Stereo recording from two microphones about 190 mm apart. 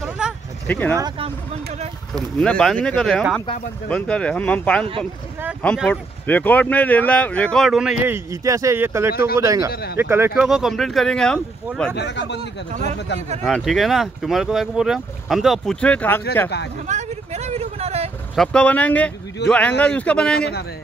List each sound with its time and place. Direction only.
0.2 s a sound: 5° right (ahead or behind)
0.7 s speech: 10° left (ahead or behind)
0.9 s speech: 20° right (ahead or behind)
2.1 s speech: 5° left (ahead or behind); by 9.7 s 15° right (ahead or behind)
9.7 s speech: 55° left (ahead or behind)
9.9 s speech: 10° right (ahead or behind); by 11.9 s 5° left (ahead or behind)
11.9 s speech: 65° left (ahead or behind)
13.4 s speech: centre (ahead or behind)
16.8 s vehicle: 35° right (ahead or behind)
18.3 s speech: 5° left (ahead or behind)
20.3 s speech: 55° left (ahead or behind)